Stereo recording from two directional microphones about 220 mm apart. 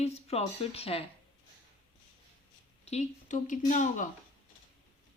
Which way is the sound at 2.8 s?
30° left (ahead or behind).